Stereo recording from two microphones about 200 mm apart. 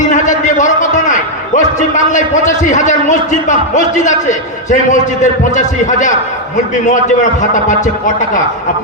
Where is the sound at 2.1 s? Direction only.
40° left (ahead or behind).